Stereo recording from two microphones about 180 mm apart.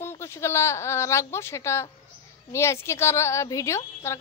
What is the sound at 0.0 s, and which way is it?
A woman's voice, 15° left (ahead or behind).